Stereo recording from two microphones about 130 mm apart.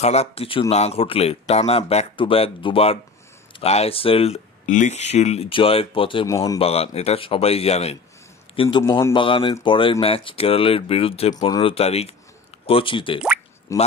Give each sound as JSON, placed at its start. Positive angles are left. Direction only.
{"t": 0.0, "sound": "speech", "side_deg": 55}
{"t": 4.6, "sound": "speech", "side_deg": 70}
{"t": 6.2, "sound": "speech", "side_deg": 25}
{"t": 6.6, "sound": "speech", "side_deg": 50}
{"t": 8.5, "sound": "speech", "side_deg": 35}
{"t": 13.7, "sound": "speech", "side_deg": 25}